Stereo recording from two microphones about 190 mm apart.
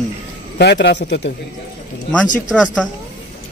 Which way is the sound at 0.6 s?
65° left (ahead or behind).